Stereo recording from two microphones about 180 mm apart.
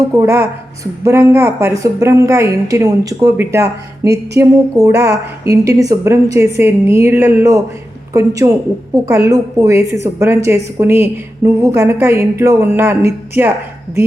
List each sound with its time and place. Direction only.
0.0 s a woman's voice: 15° right (ahead or behind)